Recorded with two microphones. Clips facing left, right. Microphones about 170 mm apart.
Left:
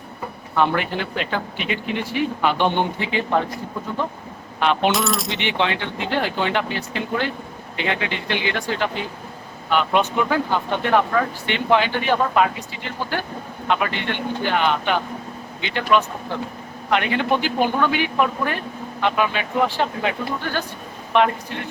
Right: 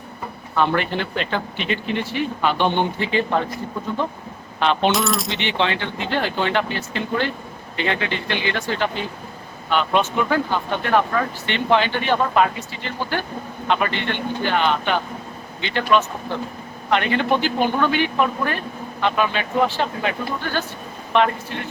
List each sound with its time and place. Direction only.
0.7 s speech: 10° left (ahead or behind)
4.6 s coin: 10° left (ahead or behind)
5.3 s speech: 15° left (ahead or behind)
11.4 s speech: 10° left (ahead or behind)